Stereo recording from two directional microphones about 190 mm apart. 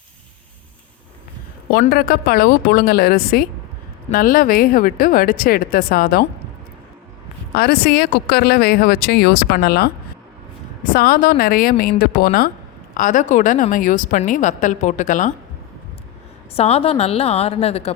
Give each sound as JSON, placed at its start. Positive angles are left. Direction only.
{"t": 1.9, "sound": "speech", "side_deg": 50}
{"t": 7.5, "sound": "a woman's voice", "side_deg": 55}
{"t": 16.6, "sound": "a woman's voice", "side_deg": 30}